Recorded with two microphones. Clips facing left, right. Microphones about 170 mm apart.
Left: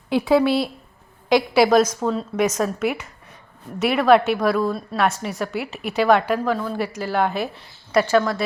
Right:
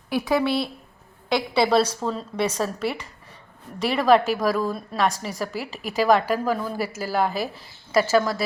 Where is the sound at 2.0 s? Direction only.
10° left (ahead or behind).